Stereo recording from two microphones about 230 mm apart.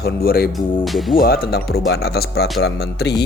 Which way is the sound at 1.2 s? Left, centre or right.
Left.